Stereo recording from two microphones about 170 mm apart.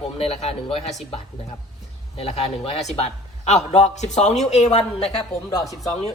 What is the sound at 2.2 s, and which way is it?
A man's voice, 35° left (ahead or behind).